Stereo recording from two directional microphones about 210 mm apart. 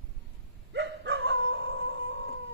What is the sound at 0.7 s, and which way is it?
Dog, 60° right (ahead or behind).